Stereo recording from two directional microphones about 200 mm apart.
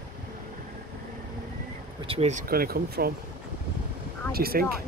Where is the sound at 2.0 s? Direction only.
30° right (ahead or behind).